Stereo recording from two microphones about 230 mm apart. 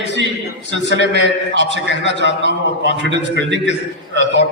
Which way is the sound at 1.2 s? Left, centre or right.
Left.